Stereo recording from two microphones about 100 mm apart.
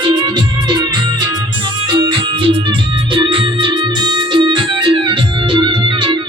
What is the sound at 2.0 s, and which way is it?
Music, 55° right (ahead or behind).